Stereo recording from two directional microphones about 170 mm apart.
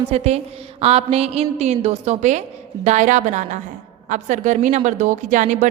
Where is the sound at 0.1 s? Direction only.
40° right (ahead or behind).